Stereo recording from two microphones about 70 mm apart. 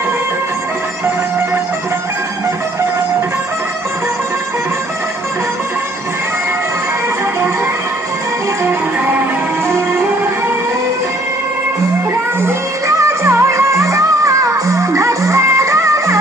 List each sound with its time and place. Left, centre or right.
8.6 s music: right
12.8 s music: right